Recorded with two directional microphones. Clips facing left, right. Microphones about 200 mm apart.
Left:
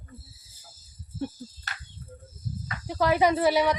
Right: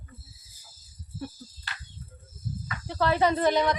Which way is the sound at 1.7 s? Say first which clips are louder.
Left 1 dB; 50° left (ahead or behind).